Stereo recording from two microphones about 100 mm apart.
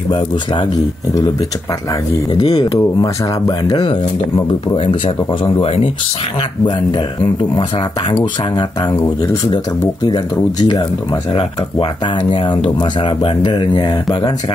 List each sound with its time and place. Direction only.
0.1 s speech: 50° left (ahead or behind)
2.3 s speech: 40° left (ahead or behind)
4.8 s speech: 55° left (ahead or behind)
10.0 s speech: 45° left (ahead or behind)
11.3 s speech: 60° left (ahead or behind)
13.2 s speech: 50° left (ahead or behind)